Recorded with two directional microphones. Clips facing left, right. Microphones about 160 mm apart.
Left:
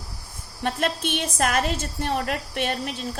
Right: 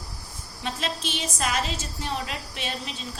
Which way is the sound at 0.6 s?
55° left (ahead or behind).